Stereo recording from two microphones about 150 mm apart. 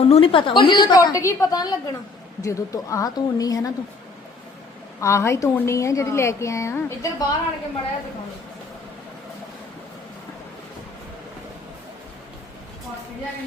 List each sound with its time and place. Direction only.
0.0 s a woman's voice: 40° left (ahead or behind); by 3.7 s 25° left (ahead or behind)
4.9 s a woman's voice: 20° left (ahead or behind)